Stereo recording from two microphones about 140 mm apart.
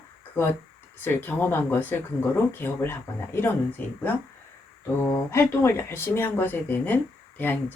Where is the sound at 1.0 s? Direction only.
15° left (ahead or behind).